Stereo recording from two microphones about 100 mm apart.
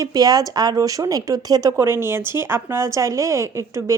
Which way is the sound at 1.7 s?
25° right (ahead or behind).